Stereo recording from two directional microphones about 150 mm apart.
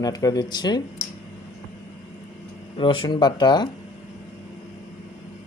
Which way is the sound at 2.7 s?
35° left (ahead or behind).